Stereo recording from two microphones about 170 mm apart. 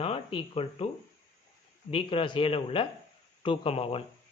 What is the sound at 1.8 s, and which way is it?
Speech, 30° left (ahead or behind).